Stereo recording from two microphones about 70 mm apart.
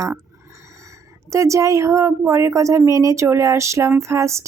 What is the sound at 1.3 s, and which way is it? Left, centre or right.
A woman's voice, right.